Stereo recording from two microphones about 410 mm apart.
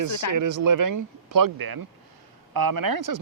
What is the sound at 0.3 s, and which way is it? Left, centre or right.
Speech, right.